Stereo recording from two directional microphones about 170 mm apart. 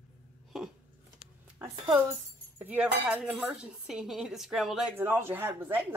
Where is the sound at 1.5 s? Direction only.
15° right (ahead or behind).